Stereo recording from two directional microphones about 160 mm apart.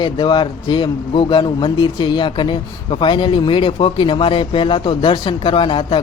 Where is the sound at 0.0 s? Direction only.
30° left (ahead or behind).